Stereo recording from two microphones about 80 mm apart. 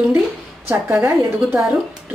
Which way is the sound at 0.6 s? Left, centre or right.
Right.